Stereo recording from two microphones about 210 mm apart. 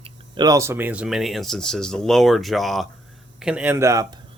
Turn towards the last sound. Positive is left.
turn(degrees=-15)  # may be behind; listen again after turning